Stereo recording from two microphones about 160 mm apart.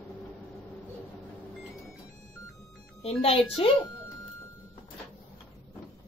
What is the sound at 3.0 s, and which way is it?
Speech, 40° left (ahead or behind).